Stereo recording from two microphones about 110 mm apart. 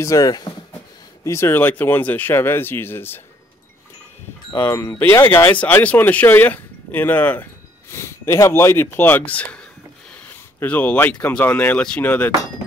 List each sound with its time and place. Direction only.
0.0 s speech: 35° left (ahead or behind)
1.2 s speech: 25° left (ahead or behind)
4.6 s speech: 25° left (ahead or behind)
5.5 s speech: 15° left (ahead or behind)